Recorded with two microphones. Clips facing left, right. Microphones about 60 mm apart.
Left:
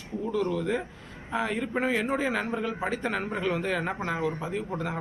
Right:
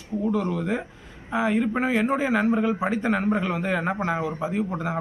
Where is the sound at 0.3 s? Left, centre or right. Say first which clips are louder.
Right 2 dB; centre.